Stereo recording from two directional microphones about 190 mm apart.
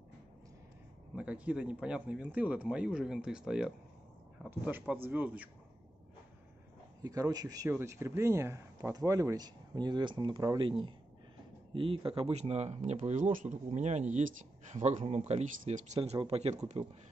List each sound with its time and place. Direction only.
1.1 s speech: 5° right (ahead or behind)
7.0 s speech: 20° right (ahead or behind)
11.7 s speech: 25° right (ahead or behind)